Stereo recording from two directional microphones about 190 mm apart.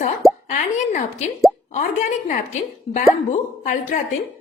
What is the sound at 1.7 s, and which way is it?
A woman's voice, 40° left (ahead or behind).